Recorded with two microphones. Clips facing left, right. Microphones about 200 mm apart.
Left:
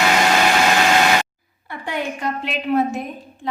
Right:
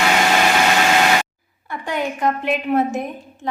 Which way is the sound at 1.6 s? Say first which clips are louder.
Right 2 dB; 45° right (ahead or behind).